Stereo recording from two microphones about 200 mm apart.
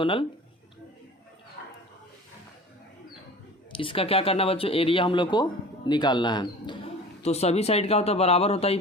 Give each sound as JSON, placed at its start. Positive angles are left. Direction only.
{"t": 0.0, "sound": "speech", "side_deg": 25}
{"t": 3.7, "sound": "speech", "side_deg": 25}